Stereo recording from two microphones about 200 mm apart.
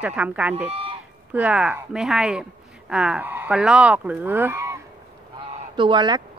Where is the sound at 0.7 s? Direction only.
30° right (ahead or behind).